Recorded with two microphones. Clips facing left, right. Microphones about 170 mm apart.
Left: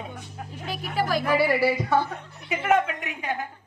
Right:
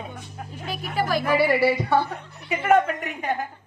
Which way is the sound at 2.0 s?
35° right (ahead or behind).